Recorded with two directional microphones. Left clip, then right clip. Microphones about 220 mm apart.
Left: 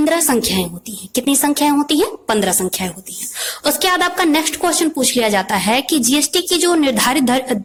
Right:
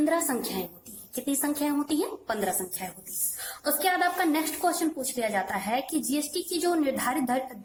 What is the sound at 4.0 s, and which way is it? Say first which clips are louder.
A woman's voice: left 10 dB; 40° left (ahead or behind).